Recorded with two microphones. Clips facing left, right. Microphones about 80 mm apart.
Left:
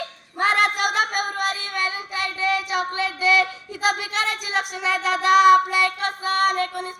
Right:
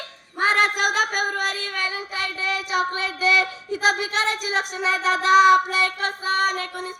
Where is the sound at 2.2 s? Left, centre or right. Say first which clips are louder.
Left 6 dB; left.